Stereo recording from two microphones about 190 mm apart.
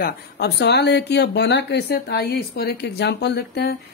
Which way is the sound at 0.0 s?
60° left (ahead or behind).